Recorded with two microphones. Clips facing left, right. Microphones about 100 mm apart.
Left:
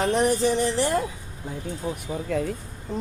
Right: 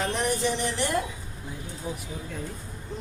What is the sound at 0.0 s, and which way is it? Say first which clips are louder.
Speech: left 6 dB; 35° left (ahead or behind).